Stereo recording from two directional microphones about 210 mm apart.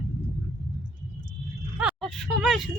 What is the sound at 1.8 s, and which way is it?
Speech, centre (ahead or behind).